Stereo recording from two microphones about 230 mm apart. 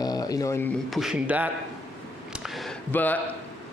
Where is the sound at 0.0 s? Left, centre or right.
Centre.